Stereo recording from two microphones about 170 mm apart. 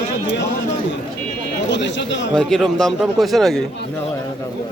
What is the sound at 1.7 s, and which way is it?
Speech, 90° left.